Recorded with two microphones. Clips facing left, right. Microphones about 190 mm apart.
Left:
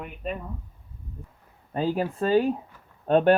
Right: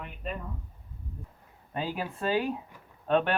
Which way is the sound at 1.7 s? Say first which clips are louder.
Left 8 dB; 40° left (ahead or behind).